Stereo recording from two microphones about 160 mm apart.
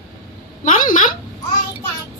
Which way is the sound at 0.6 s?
55° left (ahead or behind).